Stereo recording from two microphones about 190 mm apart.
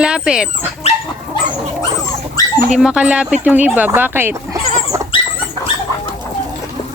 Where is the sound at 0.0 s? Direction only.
5° right (ahead or behind).